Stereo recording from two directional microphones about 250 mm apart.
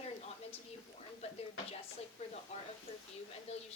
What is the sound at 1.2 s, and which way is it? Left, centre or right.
Speech, left.